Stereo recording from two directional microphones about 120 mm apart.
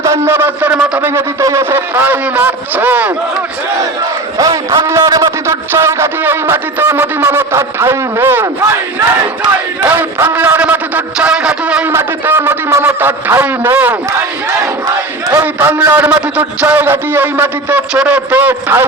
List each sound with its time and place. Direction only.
0.0 s a man's voice: 20° right (ahead or behind)
4.4 s a man's voice: 30° right (ahead or behind)
9.9 s a man's voice: 15° right (ahead or behind)
15.3 s a man's voice: 15° right (ahead or behind)